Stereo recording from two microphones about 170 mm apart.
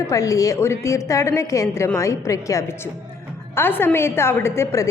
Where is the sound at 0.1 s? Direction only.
20° left (ahead or behind).